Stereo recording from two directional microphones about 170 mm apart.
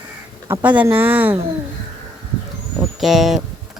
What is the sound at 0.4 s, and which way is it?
Speech, 10° right (ahead or behind).